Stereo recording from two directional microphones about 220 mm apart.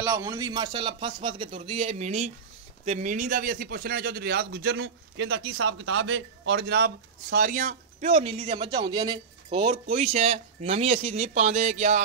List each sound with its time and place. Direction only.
0.0 s speech: 15° right (ahead or behind); by 12.0 s 30° right (ahead or behind)